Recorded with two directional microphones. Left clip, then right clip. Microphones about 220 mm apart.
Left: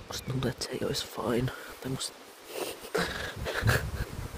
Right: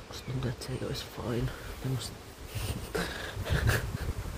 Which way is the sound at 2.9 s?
25° left (ahead or behind).